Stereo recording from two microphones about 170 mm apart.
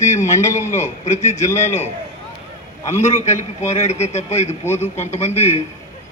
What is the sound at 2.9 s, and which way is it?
A man's voice, 40° left (ahead or behind).